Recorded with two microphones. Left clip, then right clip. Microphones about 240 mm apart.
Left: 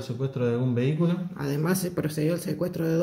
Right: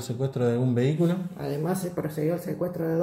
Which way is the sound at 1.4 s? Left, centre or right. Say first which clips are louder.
Left 4 dB; left.